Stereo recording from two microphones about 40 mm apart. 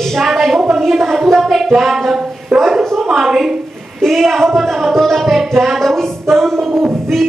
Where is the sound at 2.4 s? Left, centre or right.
Centre.